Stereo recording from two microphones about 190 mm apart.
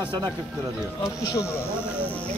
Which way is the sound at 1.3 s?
15° left (ahead or behind).